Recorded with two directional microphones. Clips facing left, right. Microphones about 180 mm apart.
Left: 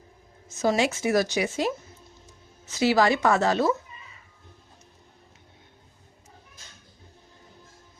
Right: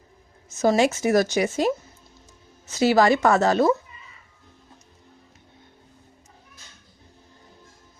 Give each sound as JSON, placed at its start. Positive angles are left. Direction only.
{"t": 0.6, "sound": "speech", "side_deg": -45}